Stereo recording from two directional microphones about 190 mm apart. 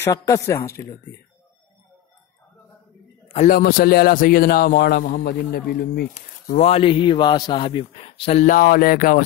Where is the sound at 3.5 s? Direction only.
50° left (ahead or behind).